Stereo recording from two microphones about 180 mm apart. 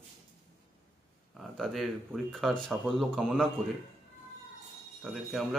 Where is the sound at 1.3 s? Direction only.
Centre (ahead or behind).